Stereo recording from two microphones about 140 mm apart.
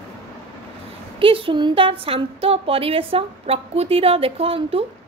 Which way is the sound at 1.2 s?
40° right (ahead or behind).